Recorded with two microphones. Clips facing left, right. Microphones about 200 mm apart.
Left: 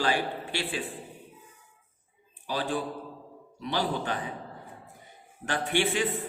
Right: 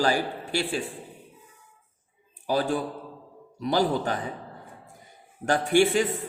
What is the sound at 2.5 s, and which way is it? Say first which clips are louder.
A man's voice: right 5 dB; 45° right (ahead or behind).